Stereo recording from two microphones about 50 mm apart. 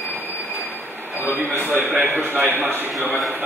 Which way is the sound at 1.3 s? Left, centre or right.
Right.